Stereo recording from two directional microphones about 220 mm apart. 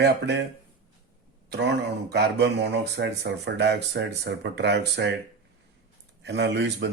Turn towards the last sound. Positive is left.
turn(degrees=-50)  # may be behind; listen again after turning